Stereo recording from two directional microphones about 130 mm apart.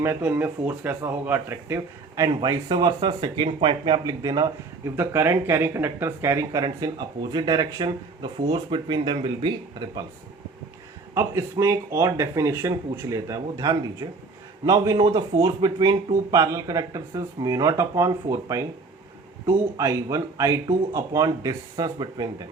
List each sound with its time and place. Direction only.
0.0 s speech: 15° right (ahead or behind); by 4.5 s 30° right (ahead or behind)
4.9 s speech: 20° right (ahead or behind)
6.7 s speech: 35° right (ahead or behind)
11.1 s speech: 25° right (ahead or behind)
19.7 s speech: 25° right (ahead or behind)